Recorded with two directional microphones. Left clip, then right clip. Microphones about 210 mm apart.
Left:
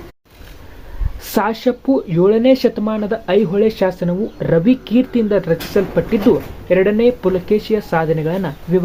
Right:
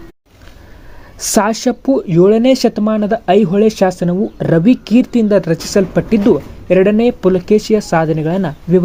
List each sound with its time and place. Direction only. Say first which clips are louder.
1.2 s speech: right 3 dB; 40° right (ahead or behind)